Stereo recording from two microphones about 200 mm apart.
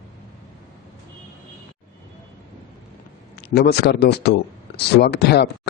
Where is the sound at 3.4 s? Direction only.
55° left (ahead or behind).